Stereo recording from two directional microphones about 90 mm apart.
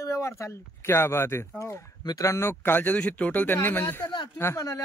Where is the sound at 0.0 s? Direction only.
35° left (ahead or behind).